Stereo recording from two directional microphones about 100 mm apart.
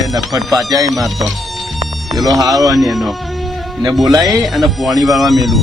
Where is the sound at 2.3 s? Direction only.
35° right (ahead or behind).